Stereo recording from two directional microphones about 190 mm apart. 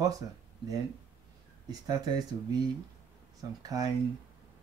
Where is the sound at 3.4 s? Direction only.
20° right (ahead or behind).